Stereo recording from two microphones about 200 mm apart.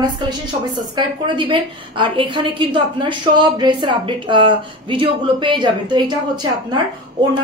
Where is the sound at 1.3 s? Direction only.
25° right (ahead or behind).